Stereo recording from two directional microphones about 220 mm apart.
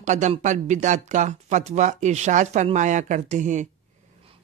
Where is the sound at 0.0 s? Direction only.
35° right (ahead or behind).